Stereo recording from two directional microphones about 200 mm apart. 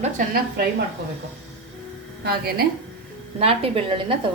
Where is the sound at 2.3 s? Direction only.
50° right (ahead or behind).